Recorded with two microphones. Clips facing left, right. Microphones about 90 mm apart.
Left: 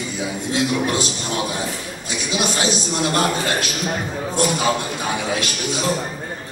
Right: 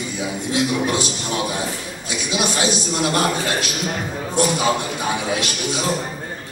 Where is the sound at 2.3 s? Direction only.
20° right (ahead or behind).